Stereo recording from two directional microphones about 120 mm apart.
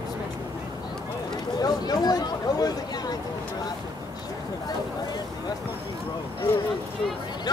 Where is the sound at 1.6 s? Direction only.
35° left (ahead or behind).